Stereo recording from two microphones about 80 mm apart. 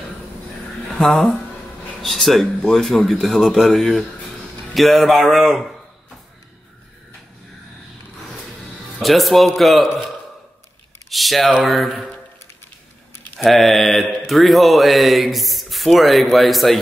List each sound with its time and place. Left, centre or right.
0.9 s speech: centre
9.0 s speech: centre
11.1 s speech: centre
13.4 s speech: centre